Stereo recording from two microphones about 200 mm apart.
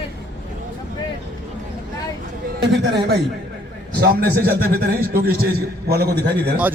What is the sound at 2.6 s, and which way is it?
A man's voice, 55° right (ahead or behind).